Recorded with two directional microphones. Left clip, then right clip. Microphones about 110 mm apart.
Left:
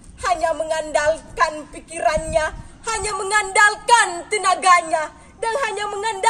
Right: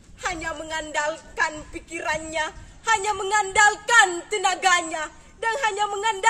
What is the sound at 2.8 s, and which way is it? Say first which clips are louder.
A woman's voice: right 1 dB; 30° right (ahead or behind).